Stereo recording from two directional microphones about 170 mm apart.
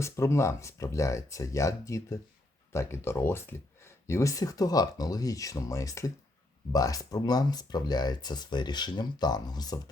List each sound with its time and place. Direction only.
0.0 s speech: 15° left (ahead or behind)